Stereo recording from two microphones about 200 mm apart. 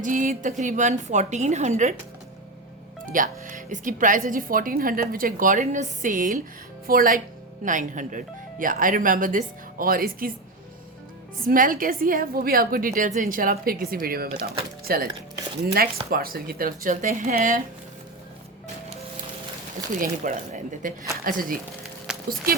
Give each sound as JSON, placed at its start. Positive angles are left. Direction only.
{"t": 0.0, "sound": "a woman's voice", "side_deg": -40}
{"t": 3.1, "sound": "speech", "side_deg": -40}
{"t": 11.4, "sound": "speech", "side_deg": -45}
{"t": 19.9, "sound": "a woman's voice", "side_deg": -40}
{"t": 22.1, "sound": "a sound", "side_deg": -5}